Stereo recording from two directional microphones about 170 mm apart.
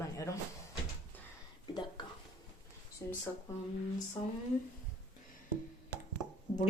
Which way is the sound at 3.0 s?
20° left (ahead or behind).